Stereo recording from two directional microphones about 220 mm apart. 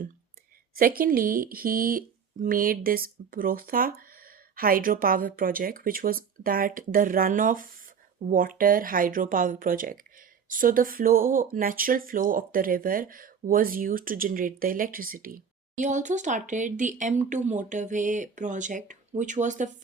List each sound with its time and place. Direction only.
0.8 s speech: 40° right (ahead or behind)